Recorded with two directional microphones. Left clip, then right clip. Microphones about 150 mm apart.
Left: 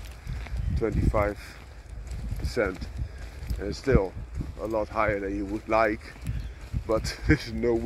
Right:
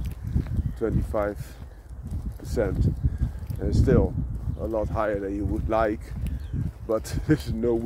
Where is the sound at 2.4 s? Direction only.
20° right (ahead or behind).